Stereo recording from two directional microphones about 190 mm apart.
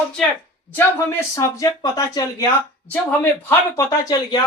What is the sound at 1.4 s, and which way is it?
Speech, 15° left (ahead or behind).